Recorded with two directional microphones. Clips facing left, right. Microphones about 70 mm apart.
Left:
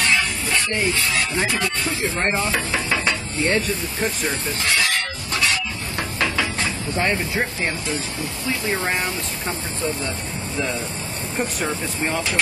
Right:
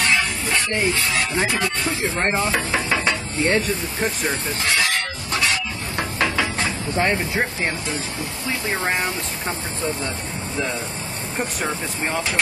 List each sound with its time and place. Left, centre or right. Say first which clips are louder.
0.0 s music: even; right
2.4 s stir: right 1 dB; right
4.0 s speech: even; right
5.3 s a sound: even; right
8.4 s speech: even; right
11.3 s speech: left 1 dB; right